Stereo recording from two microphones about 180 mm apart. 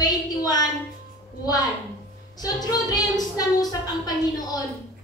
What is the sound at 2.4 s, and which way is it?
Speech, 20° left (ahead or behind).